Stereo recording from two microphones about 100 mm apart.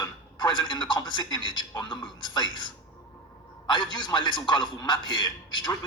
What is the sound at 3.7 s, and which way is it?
A man's voice, 45° left (ahead or behind).